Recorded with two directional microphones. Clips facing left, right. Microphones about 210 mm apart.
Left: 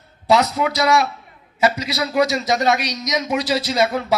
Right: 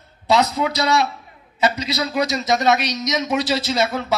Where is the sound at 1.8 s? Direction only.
20° right (ahead or behind).